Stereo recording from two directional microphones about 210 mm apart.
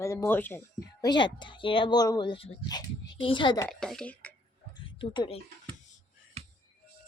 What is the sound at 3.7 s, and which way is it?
Speech, centre (ahead or behind).